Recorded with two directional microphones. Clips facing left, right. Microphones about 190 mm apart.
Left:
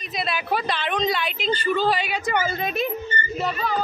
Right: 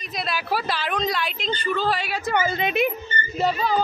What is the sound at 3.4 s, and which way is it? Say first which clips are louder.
Music: right 5 dB; 35° right (ahead or behind).